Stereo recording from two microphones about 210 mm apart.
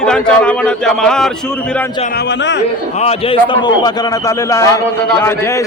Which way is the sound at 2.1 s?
55° left (ahead or behind).